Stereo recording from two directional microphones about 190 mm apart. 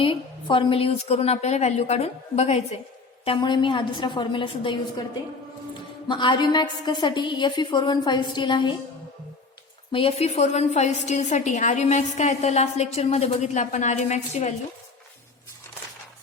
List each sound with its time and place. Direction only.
0.0 s a woman's voice: 25° left (ahead or behind)
6.1 s a woman's voice: 25° left (ahead or behind)
9.9 s a woman's voice: 30° left (ahead or behind)